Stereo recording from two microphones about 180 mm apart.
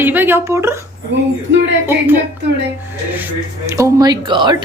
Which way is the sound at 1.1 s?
80° right.